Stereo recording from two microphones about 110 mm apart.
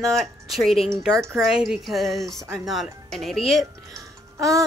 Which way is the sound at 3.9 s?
30° right (ahead or behind).